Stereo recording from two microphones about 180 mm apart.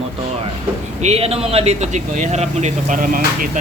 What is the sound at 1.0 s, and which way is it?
Speech, 35° right (ahead or behind).